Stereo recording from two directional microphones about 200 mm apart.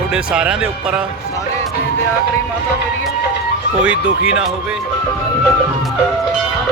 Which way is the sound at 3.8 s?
5° right (ahead or behind).